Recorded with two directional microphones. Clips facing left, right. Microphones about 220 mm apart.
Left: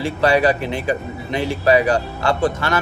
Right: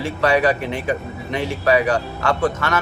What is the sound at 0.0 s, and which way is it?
Speech, 35° left (ahead or behind).